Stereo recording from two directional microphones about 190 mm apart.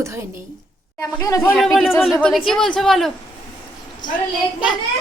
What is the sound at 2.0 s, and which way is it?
A woman's voice, centre (ahead or behind).